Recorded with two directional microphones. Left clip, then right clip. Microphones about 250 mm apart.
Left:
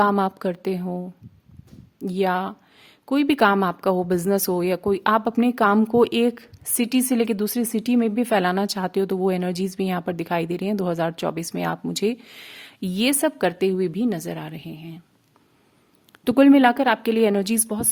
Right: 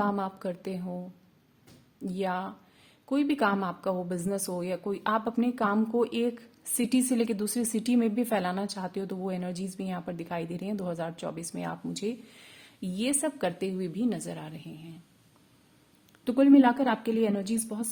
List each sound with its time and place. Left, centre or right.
0.0 s a woman's voice: left
16.2 s a woman's voice: left